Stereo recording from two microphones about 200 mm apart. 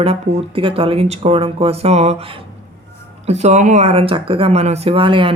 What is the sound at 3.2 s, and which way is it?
Speech, 35° right (ahead or behind).